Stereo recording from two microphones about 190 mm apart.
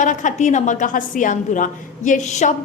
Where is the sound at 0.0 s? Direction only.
40° left (ahead or behind).